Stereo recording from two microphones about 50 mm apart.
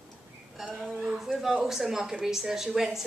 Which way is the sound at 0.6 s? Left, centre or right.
Centre.